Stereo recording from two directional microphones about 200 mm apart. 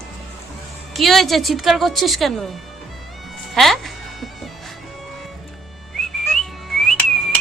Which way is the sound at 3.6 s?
Centre (ahead or behind).